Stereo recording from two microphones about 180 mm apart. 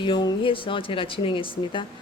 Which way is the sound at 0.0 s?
25° left (ahead or behind).